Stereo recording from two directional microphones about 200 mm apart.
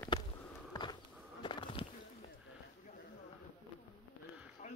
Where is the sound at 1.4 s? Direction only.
25° left (ahead or behind).